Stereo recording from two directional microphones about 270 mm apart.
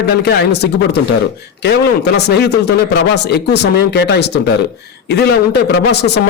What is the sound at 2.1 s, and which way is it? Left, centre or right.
A man's voice, left.